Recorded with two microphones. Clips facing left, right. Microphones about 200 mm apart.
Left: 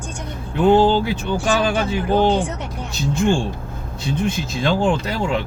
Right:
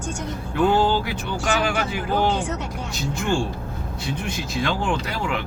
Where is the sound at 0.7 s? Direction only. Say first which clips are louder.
Left 9 dB; 25° left (ahead or behind).